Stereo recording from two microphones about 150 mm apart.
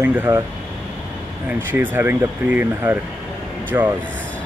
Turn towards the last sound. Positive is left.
turn(degrees=-15)  # may be behind; listen again after turning